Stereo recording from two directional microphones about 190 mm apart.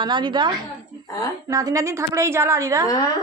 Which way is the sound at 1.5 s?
20° right (ahead or behind).